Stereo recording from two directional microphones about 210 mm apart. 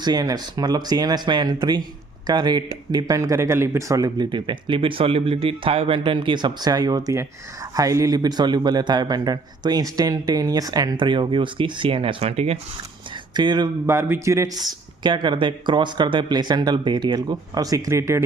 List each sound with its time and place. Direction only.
0.0 s speech: 20° right (ahead or behind)